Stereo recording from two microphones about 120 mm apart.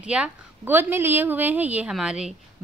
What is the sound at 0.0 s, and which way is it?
A woman's voice, 10° right (ahead or behind).